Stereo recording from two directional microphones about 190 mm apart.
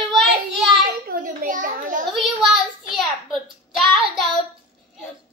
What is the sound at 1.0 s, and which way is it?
Speech, 45° right (ahead or behind).